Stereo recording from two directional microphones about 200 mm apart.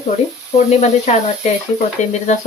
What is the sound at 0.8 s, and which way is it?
Speech, 35° left (ahead or behind).